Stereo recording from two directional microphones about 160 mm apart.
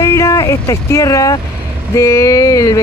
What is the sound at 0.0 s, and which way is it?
Speech, 20° left (ahead or behind).